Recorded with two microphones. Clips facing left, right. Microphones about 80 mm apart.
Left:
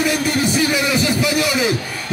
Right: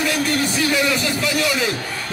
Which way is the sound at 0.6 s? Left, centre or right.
Centre.